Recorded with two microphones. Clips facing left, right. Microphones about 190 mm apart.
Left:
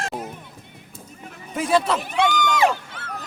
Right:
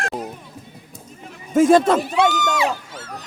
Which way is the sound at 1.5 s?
45° right (ahead or behind).